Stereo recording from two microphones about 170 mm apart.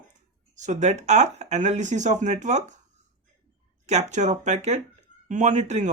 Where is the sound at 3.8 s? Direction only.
45° right (ahead or behind).